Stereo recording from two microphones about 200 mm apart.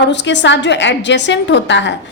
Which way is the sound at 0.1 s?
60° left (ahead or behind).